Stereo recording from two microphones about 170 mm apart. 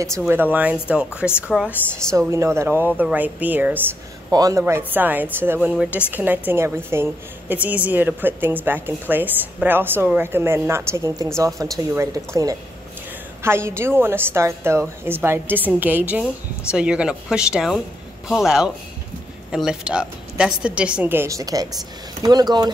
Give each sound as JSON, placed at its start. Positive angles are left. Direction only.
{"t": 0.3, "sound": "a woman's voice", "side_deg": -10}
{"t": 2.0, "sound": "a woman's voice", "side_deg": -15}
{"t": 4.3, "sound": "a woman's voice", "side_deg": -20}
{"t": 13.4, "sound": "a woman's voice", "side_deg": -15}